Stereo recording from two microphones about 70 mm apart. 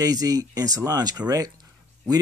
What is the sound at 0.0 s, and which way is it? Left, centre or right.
Speech, right.